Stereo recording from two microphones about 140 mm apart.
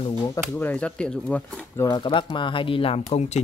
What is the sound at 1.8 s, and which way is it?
Speech, 35° left (ahead or behind).